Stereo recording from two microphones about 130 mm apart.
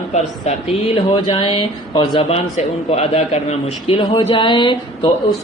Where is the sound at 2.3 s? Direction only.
55° left (ahead or behind); by 5.1 s 40° left (ahead or behind).